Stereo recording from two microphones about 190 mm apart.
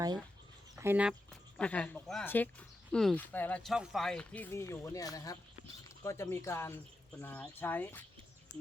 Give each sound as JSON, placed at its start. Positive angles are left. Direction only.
{"t": 0.8, "sound": "speech", "side_deg": -10}
{"t": 1.5, "sound": "speech", "side_deg": 5}